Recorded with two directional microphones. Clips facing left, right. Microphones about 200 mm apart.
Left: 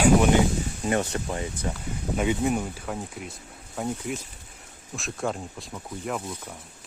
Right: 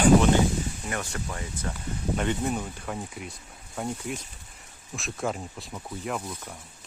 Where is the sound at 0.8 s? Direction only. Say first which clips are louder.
Left 7 dB; 25° left (ahead or behind).